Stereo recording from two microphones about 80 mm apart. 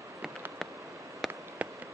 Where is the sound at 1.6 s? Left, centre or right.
Centre.